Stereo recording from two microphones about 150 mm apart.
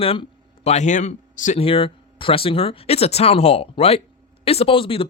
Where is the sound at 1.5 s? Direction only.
35° left (ahead or behind).